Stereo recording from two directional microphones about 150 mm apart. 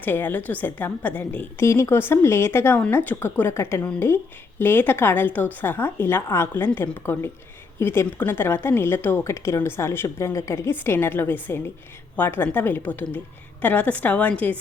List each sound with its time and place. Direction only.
0.0 s a woman's voice: 10° left (ahead or behind)